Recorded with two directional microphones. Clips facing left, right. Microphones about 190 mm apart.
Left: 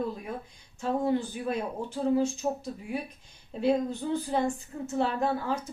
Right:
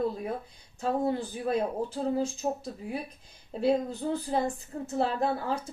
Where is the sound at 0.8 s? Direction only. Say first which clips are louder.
Left 1 dB; 35° right (ahead or behind).